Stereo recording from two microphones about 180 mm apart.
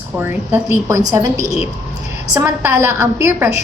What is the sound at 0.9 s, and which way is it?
Speech, 20° right (ahead or behind).